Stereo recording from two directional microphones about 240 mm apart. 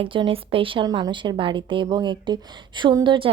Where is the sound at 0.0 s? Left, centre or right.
Right.